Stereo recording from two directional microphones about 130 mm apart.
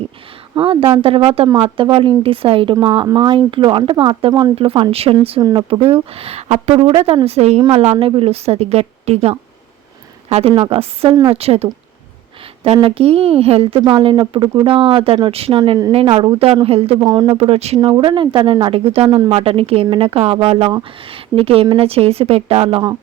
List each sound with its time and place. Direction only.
0.5 s a woman's voice: 45° right (ahead or behind)
5.4 s speech: 30° right (ahead or behind)
5.7 s a woman's voice: 45° right (ahead or behind)
6.7 s a woman's voice: 45° right (ahead or behind)
17.0 s speech: 30° right (ahead or behind)
17.2 s a woman's voice: 45° right (ahead or behind)
17.7 s a woman's voice: 35° right (ahead or behind); by 22.8 s 50° right (ahead or behind)